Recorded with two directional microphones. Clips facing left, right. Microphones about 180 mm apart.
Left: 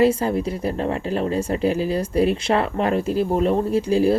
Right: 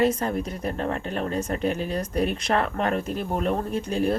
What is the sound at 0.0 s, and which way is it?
Speech, 30° left (ahead or behind).